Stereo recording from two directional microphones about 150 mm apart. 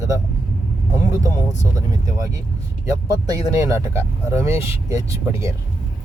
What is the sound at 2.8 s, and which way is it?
Speech, 20° right (ahead or behind).